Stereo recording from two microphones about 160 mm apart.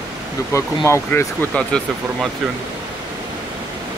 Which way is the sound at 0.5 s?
20° left (ahead or behind).